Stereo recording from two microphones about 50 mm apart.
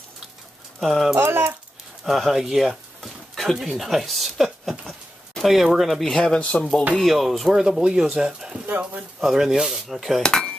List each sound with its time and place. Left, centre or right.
0.7 s speech: centre
2.0 s a sound: centre
3.5 s speech: centre
6.1 s speech: centre
6.4 s speech: left
7.0 s speech: centre
7.6 s speech: centre
8.6 s speech: right
9.2 s speech: centre
10.2 s cutlery: centre